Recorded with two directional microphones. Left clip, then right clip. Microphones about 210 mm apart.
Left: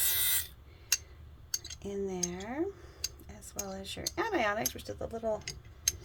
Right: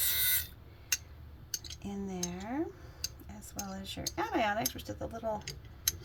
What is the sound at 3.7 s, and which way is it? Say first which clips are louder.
Speech: left 2 dB; 35° left (ahead or behind).